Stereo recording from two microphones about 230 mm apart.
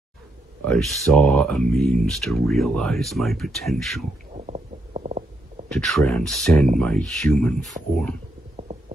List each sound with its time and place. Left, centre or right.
0.7 s speech: centre
4.5 s stomach rumble: right
5.7 s speech: centre
8.5 s stomach rumble: right